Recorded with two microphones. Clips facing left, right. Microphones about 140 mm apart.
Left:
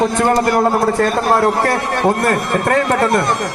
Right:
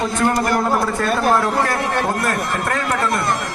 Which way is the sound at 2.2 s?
50° left (ahead or behind).